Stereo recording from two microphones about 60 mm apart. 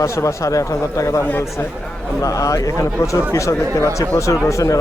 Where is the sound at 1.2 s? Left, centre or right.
Left.